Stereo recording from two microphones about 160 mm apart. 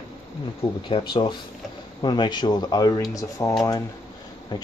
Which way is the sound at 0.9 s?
30° left (ahead or behind).